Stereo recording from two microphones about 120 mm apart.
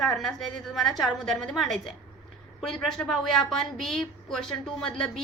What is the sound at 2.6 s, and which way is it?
A woman's voice, 5° left (ahead or behind).